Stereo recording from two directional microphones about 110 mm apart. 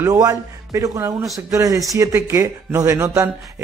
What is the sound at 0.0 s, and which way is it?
A man's voice, 30° right (ahead or behind).